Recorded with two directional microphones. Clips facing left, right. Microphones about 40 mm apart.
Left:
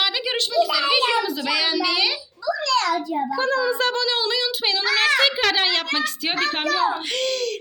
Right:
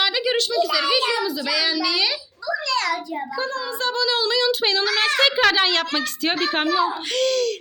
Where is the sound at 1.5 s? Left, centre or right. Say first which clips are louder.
Right 1 dB; left.